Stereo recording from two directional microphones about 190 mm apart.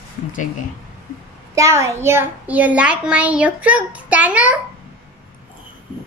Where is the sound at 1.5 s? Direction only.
15° right (ahead or behind).